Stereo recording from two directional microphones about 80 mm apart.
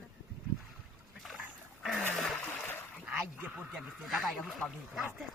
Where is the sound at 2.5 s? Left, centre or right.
Left.